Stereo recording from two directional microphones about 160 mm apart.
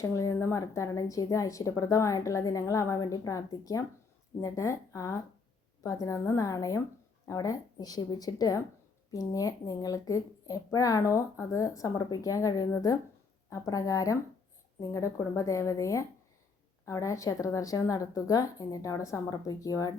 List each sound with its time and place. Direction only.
0.0 s a woman's voice: 20° left (ahead or behind)